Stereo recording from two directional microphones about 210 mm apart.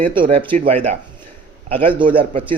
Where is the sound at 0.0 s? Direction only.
25° right (ahead or behind).